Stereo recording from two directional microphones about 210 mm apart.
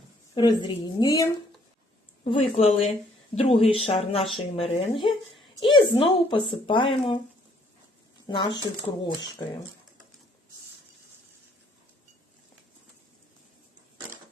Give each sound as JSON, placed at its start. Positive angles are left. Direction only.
{"t": 0.3, "sound": "a woman's voice", "side_deg": 20}
{"t": 2.2, "sound": "a woman's voice", "side_deg": 30}
{"t": 8.3, "sound": "a woman's voice", "side_deg": 20}